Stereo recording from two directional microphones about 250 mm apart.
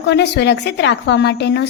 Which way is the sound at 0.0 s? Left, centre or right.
Left.